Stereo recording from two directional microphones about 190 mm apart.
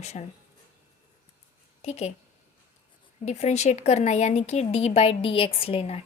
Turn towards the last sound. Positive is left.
turn(degrees=30)  # may be behind; listen again after turning